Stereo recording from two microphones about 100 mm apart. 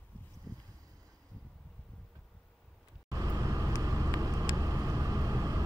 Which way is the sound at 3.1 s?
35° right (ahead or behind).